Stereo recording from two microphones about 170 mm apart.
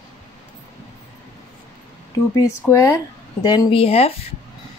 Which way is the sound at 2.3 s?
20° left (ahead or behind).